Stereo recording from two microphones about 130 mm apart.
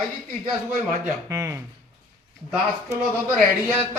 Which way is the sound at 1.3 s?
25° right (ahead or behind).